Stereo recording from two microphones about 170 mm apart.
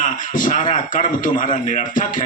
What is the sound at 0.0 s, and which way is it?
A man's voice, 50° left (ahead or behind).